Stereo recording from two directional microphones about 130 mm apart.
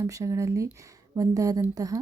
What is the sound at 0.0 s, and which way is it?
Speech, 25° right (ahead or behind).